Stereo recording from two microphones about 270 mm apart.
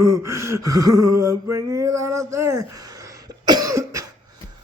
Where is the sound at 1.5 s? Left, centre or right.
Centre.